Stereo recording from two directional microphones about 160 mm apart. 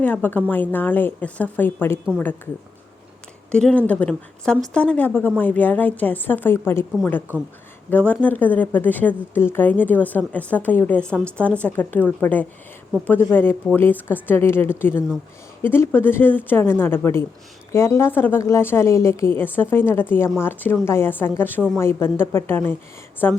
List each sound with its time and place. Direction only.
0.0 s a woman's voice: 10° left (ahead or behind)
3.5 s a woman's voice: 5° left (ahead or behind)
7.9 s a woman's voice: 10° left (ahead or behind)